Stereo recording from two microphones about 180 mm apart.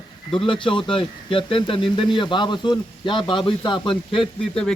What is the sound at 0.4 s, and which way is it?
Speech, 30° left (ahead or behind).